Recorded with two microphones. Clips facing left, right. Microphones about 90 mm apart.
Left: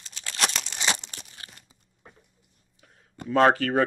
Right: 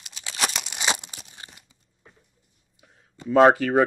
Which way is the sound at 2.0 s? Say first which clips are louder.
Left 2 dB; 50° left (ahead or behind).